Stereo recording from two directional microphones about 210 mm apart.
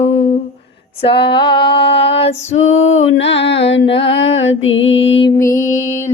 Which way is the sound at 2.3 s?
65° left (ahead or behind).